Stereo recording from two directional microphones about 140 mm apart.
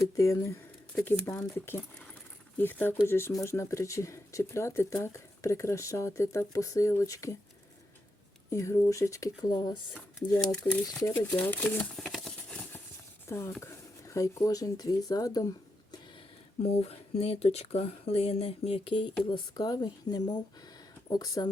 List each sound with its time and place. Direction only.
0.0 s speech: 20° left (ahead or behind)
8.4 s speech: 20° left (ahead or behind)
9.9 s speech: 10° left (ahead or behind)
13.2 s speech: 20° left (ahead or behind)
16.8 s speech: 45° left (ahead or behind)
19.3 s speech: 30° left (ahead or behind)